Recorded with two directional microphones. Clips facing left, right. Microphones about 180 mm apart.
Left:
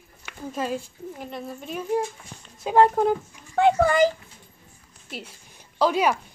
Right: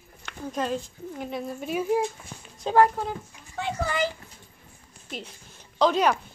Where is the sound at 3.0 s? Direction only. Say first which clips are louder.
Left 10 dB; 50° left (ahead or behind).